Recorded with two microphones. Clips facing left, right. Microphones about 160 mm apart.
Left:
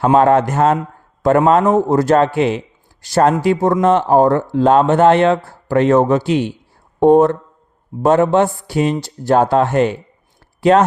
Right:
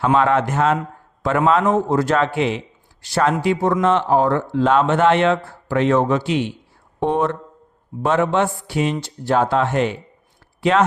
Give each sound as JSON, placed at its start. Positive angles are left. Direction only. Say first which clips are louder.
{"t": 0.0, "sound": "speech", "louder": "left 5 dB", "side_deg": 40}